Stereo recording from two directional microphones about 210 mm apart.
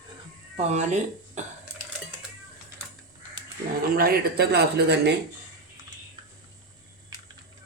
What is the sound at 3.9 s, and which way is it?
Speech, 45° right (ahead or behind).